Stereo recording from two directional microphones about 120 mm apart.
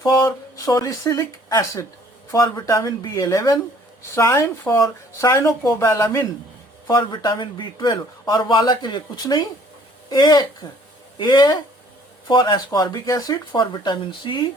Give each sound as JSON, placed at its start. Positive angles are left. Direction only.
{"t": 0.0, "sound": "speech", "side_deg": 30}
{"t": 6.8, "sound": "speech", "side_deg": 35}